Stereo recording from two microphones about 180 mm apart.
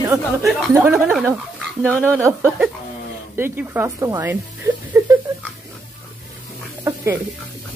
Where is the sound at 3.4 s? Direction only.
10° right (ahead or behind).